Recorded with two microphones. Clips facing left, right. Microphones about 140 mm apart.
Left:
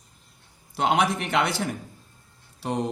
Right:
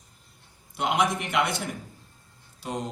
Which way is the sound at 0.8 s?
70° left (ahead or behind).